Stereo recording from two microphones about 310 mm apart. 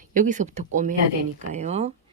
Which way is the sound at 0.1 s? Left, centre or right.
Right.